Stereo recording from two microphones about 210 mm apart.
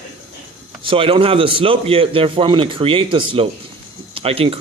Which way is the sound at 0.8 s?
25° right (ahead or behind).